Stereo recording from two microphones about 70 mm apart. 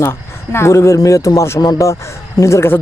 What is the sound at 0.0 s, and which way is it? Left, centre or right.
Speech, left.